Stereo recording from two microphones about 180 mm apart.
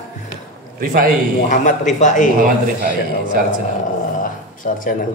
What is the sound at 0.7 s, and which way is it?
Speech, 50° right (ahead or behind).